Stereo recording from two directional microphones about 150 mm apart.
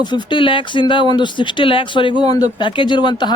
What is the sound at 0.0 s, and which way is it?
Speech, 30° left (ahead or behind).